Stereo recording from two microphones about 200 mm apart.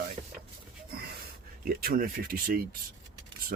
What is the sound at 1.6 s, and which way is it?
Speech, 45° right (ahead or behind).